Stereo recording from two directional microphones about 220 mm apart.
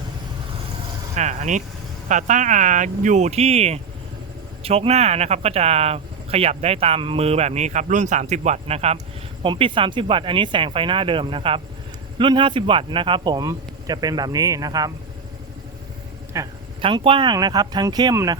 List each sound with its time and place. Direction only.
1.1 s speech: 35° right (ahead or behind); by 14.9 s 15° right (ahead or behind)
16.3 s speech: 20° right (ahead or behind)